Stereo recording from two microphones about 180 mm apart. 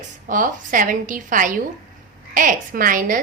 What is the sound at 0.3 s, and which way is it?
A woman's voice, 50° right (ahead or behind).